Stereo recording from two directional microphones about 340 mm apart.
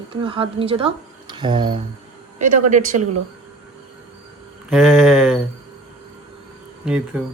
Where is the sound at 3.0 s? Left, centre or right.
Right.